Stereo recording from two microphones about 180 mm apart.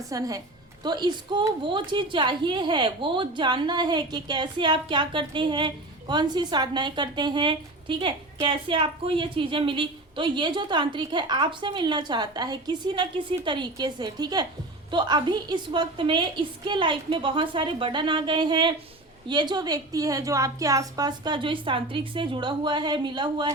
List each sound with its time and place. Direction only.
0.1 s a woman's voice: 20° right (ahead or behind)